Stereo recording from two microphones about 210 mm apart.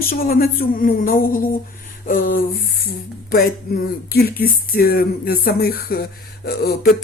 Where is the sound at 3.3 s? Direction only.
45° left (ahead or behind).